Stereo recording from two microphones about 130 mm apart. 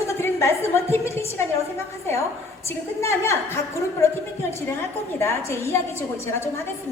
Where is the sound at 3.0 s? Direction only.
20° left (ahead or behind).